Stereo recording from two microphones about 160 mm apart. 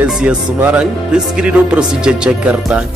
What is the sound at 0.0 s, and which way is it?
Speech, 5° right (ahead or behind).